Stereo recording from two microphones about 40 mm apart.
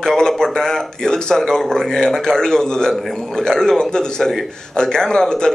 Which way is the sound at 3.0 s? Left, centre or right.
Centre.